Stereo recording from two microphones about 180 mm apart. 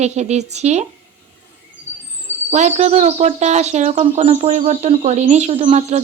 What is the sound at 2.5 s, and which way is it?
Speech, 40° right (ahead or behind).